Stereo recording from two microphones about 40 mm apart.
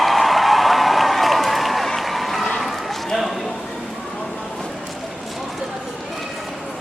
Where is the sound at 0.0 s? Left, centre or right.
Centre.